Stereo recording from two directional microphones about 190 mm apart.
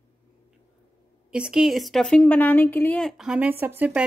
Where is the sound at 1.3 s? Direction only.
5° right (ahead or behind).